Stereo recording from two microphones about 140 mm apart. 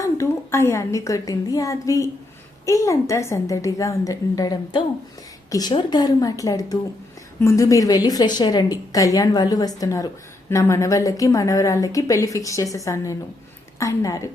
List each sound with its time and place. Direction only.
0.0 s a woman's voice: 20° left (ahead or behind)